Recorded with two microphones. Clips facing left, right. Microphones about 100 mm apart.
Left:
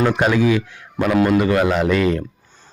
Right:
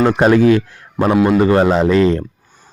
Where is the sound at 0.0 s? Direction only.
40° right (ahead or behind).